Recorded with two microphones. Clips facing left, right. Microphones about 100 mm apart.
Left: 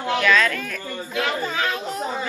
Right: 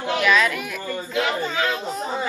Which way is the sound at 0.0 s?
20° right (ahead or behind).